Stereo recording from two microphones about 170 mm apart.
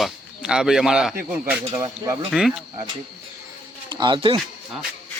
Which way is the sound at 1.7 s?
20° right (ahead or behind).